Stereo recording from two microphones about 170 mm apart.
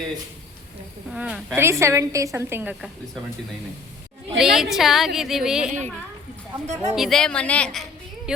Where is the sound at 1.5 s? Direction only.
15° right (ahead or behind).